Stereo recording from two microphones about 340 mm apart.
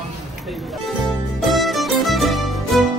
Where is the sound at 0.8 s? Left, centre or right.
Centre.